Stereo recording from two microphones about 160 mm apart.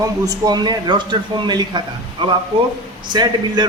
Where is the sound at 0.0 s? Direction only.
25° right (ahead or behind).